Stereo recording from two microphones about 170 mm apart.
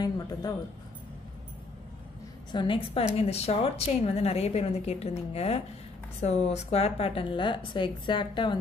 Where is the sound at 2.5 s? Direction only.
30° left (ahead or behind).